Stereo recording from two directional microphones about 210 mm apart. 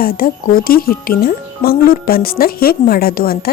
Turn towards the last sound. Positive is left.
turn(degrees=45)  # may be behind; listen again after turning